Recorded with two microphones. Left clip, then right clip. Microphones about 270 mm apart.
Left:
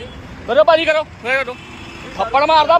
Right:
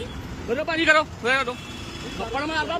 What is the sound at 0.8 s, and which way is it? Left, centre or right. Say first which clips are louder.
Speech: left 2 dB; centre.